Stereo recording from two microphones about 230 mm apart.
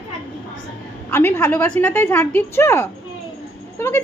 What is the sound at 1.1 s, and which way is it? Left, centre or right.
Speech, centre.